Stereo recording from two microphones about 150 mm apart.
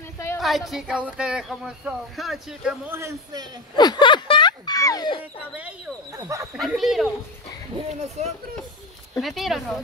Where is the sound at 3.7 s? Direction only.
30° left (ahead or behind).